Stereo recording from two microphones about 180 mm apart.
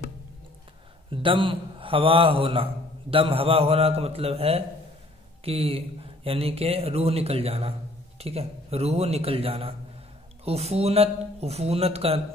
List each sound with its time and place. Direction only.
1.1 s a man's voice: 30° right (ahead or behind)